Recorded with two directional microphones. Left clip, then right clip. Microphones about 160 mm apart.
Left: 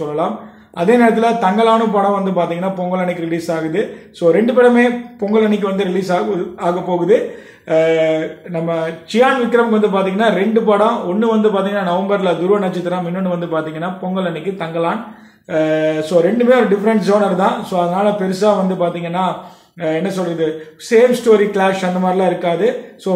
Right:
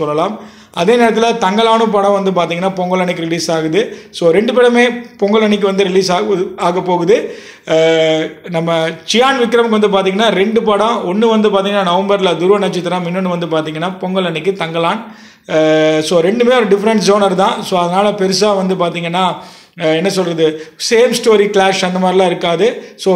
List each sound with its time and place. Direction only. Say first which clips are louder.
0.7 s speech: right 2 dB; 20° right (ahead or behind)